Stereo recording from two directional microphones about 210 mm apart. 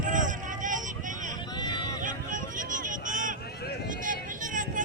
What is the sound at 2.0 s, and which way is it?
Vehicle, 40° right (ahead or behind).